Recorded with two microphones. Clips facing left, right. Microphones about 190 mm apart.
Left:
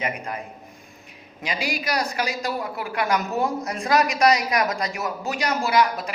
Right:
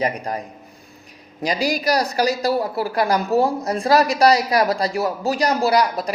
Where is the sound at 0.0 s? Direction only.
35° right (ahead or behind).